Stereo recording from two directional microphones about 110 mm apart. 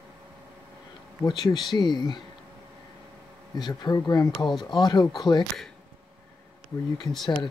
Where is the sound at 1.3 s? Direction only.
40° left (ahead or behind).